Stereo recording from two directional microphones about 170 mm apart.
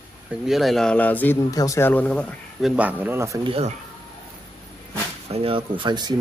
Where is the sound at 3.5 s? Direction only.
35° right (ahead or behind).